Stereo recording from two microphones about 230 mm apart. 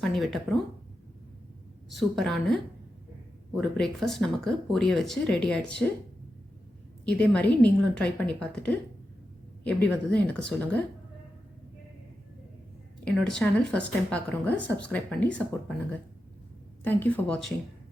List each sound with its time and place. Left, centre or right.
0.0 s speech: centre
2.0 s speech: centre
7.0 s speech: centre
13.1 s speech: centre
16.8 s speech: centre